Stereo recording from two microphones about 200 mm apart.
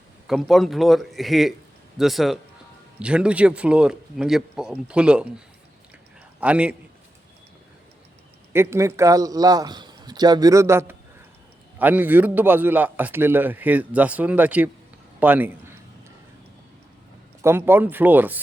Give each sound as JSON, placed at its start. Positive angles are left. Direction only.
{"t": 0.3, "sound": "speech", "side_deg": 0}
{"t": 6.4, "sound": "a man's voice", "side_deg": -5}
{"t": 8.5, "sound": "a man's voice", "side_deg": -15}
{"t": 15.2, "sound": "a sound", "side_deg": -10}
{"t": 17.4, "sound": "a man's voice", "side_deg": -10}